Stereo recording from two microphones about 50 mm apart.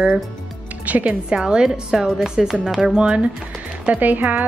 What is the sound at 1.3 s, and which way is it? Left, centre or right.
Speech, centre.